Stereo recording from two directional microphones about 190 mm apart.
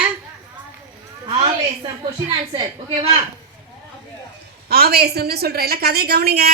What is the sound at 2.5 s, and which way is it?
Speech, 30° right (ahead or behind).